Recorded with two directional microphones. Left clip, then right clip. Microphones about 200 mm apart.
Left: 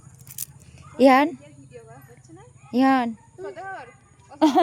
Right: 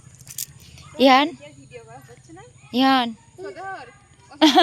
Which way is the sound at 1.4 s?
35° right (ahead or behind).